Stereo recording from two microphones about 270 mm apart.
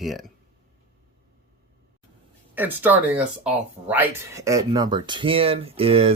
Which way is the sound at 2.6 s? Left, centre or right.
Centre.